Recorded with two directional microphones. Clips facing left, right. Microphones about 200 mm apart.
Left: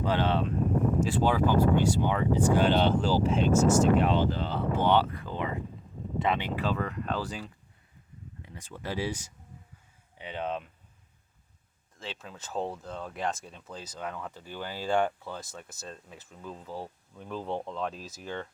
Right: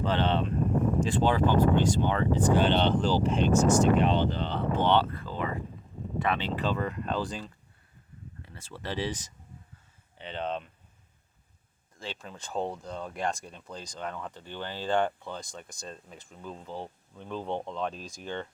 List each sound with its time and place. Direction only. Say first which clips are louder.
0.0 s speech: even; 10° left (ahead or behind)
6.6 s speech: right 1 dB; centre (ahead or behind)
11.9 s speech: right 1 dB; 5° left (ahead or behind)